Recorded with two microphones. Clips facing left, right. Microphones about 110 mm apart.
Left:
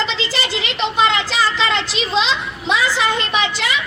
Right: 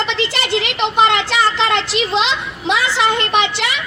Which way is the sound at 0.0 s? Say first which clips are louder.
Right 2 dB; 60° right (ahead or behind).